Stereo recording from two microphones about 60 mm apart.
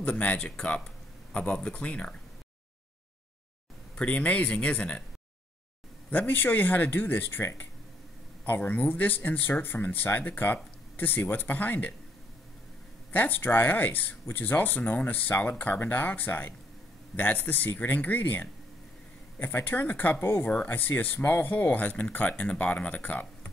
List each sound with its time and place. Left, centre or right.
0.0 s speech: left
3.9 s speech: left
6.0 s speech: left
8.5 s speech: left
13.1 s speech: left
20.2 s speech: left
20.6 s speech: left